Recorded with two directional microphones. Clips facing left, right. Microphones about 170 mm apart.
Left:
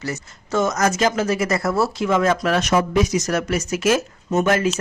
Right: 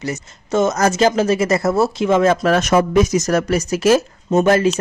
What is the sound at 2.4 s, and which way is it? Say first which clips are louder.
A woman's voice: right 4 dB; 45° right (ahead or behind).